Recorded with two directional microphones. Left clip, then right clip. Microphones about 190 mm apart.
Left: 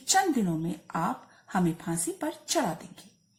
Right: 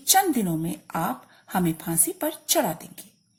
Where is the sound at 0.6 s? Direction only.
45° right (ahead or behind).